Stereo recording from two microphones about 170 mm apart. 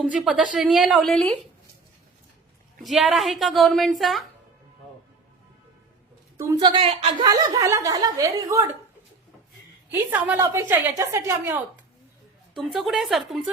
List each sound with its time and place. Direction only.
0.0 s a woman's voice: 5° right (ahead or behind)
2.8 s a woman's voice: centre (ahead or behind)
6.3 s a woman's voice: 20° right (ahead or behind)
6.7 s speech: 35° right (ahead or behind)
7.3 s speech: 25° right (ahead or behind)
9.9 s a woman's voice: 15° right (ahead or behind)
12.7 s a woman's voice: centre (ahead or behind)